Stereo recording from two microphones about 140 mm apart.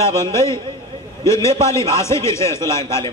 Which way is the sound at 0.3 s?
20° left (ahead or behind).